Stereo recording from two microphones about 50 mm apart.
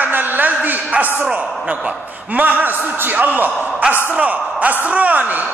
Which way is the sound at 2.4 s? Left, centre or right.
Right.